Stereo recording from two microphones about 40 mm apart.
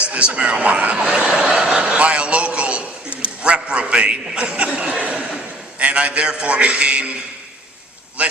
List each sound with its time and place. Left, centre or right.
0.0 s a man's voice: right
0.9 s a man's voice: centre
2.0 s a sound: right
3.4 s a man's voice: right
4.9 s a sound: right
5.8 s a man's voice: right
8.2 s a man's voice: right